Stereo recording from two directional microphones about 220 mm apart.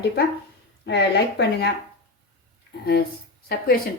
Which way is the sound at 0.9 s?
50° left (ahead or behind).